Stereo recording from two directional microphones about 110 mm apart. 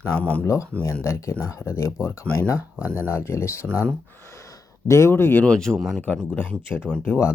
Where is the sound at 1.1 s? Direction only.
25° left (ahead or behind); by 6.0 s centre (ahead or behind).